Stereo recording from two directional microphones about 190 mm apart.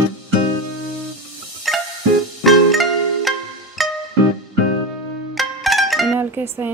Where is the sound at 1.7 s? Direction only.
Centre (ahead or behind).